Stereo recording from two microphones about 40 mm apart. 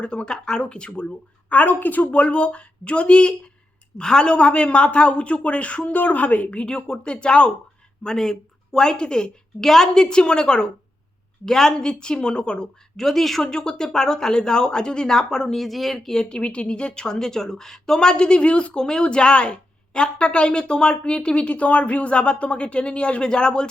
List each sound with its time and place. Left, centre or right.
0.0 s a woman's voice: left
1.5 s a woman's voice: left
2.2 s a woman's voice: left
8.0 s a woman's voice: centre
13.0 s a woman's voice: centre
13.5 s a woman's voice: centre
15.5 s speech: centre
16.1 s a woman's voice: left